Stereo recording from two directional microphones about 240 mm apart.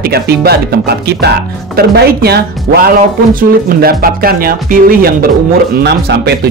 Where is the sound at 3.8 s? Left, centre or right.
Right.